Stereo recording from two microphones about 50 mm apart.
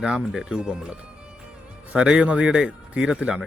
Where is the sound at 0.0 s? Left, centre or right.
Centre.